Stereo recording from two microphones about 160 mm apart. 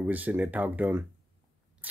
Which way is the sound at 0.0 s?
10° right (ahead or behind).